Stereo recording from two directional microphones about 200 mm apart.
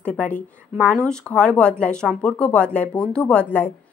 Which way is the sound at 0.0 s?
10° left (ahead or behind).